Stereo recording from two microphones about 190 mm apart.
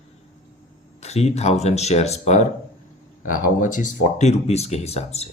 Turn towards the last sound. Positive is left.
turn(degrees=35)  # may be behind; listen again after turning